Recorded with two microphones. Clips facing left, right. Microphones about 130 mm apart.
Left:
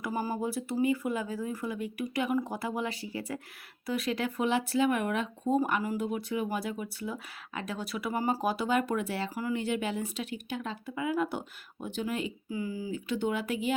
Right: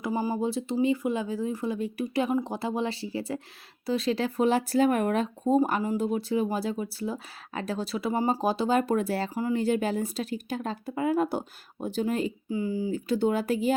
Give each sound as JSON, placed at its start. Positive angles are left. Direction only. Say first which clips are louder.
{"t": 0.0, "sound": "speech", "louder": "right 4 dB", "side_deg": -20}
{"t": 9.3, "sound": "speech", "louder": "right 4 dB", "side_deg": -25}
{"t": 9.6, "sound": "speech", "louder": "right 7 dB", "side_deg": -40}
{"t": 12.9, "sound": "speech", "louder": "right 5 dB", "side_deg": -35}